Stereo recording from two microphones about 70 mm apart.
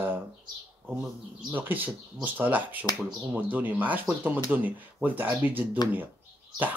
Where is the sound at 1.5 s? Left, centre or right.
Right.